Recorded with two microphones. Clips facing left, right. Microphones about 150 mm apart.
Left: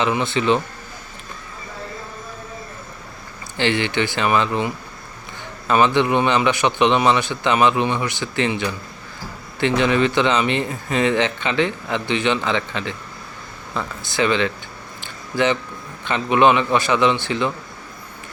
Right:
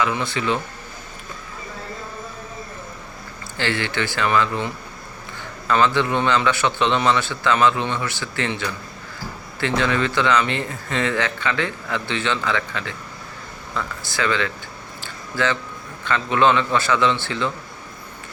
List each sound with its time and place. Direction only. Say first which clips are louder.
0.0 s speech: left 3 dB; 20° left (ahead or behind)
3.6 s a man's voice: left 4 dB; 20° left (ahead or behind)
15.0 s a sound: left 4 dB; 20° left (ahead or behind)
16.0 s speech: left 2 dB; 20° left (ahead or behind)